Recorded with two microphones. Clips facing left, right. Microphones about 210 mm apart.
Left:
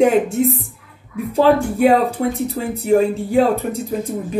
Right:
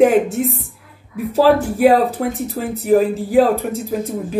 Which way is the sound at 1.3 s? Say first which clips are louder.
Right 1 dB; 5° right (ahead or behind).